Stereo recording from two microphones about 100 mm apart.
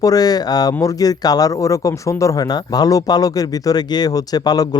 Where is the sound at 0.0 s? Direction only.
40° left (ahead or behind).